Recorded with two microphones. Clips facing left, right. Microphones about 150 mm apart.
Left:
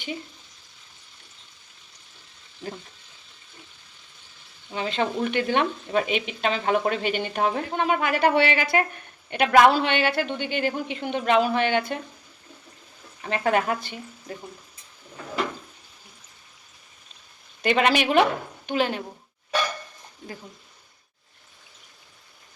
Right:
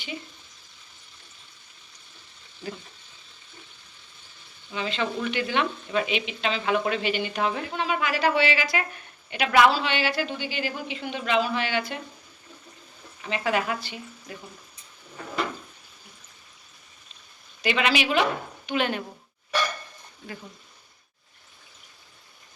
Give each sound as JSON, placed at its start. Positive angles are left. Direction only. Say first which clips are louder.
{"t": 4.7, "sound": "speech", "louder": "left 3 dB", "side_deg": 45}
{"t": 13.2, "sound": "speech", "louder": "left 3 dB", "side_deg": 50}
{"t": 17.6, "sound": "a woman's voice", "louder": "left 3 dB", "side_deg": 50}
{"t": 18.7, "sound": "a woman's voice", "louder": "left 2 dB", "side_deg": 30}